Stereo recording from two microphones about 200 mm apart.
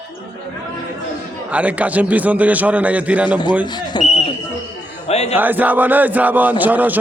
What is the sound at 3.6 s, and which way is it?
A man's voice, 20° left (ahead or behind).